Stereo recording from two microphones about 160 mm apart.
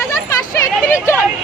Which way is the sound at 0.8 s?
15° left (ahead or behind).